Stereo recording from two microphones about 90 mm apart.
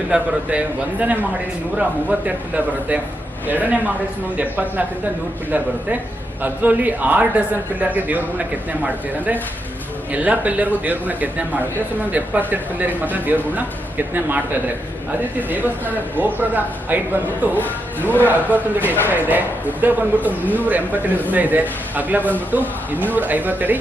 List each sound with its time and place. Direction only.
0.1 s a man's voice: 15° right (ahead or behind)
3.4 s a man's voice: 20° right (ahead or behind)
6.4 s a man's voice: 20° right (ahead or behind)